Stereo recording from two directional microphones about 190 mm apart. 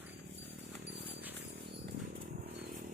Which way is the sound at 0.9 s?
60° right (ahead or behind).